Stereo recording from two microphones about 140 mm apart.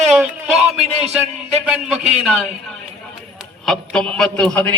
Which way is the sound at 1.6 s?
5° right (ahead or behind).